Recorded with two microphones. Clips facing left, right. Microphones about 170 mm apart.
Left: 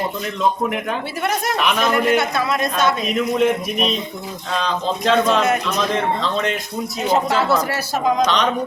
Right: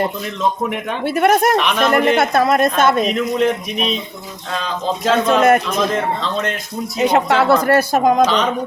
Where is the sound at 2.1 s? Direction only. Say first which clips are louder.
Right 5 dB; 50° right (ahead or behind).